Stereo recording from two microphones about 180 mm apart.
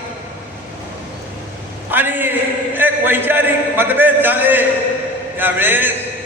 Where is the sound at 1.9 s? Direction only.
10° right (ahead or behind).